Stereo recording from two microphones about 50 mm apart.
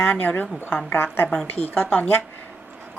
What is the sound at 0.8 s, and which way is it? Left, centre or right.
Speech, left.